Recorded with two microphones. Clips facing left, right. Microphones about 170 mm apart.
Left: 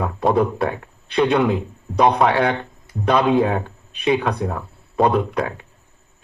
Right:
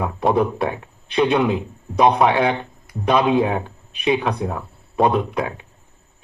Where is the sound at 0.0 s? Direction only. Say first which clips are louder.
Even; 15° right (ahead or behind).